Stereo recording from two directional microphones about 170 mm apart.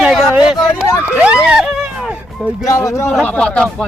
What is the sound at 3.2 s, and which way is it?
Speech, 5° left (ahead or behind).